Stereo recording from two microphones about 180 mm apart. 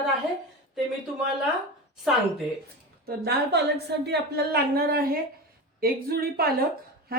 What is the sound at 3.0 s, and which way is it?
Speech, 60° right (ahead or behind).